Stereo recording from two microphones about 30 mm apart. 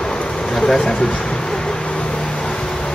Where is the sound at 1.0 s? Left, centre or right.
Left.